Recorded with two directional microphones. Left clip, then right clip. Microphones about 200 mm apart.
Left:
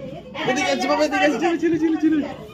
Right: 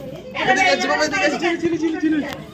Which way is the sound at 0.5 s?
40° left (ahead or behind).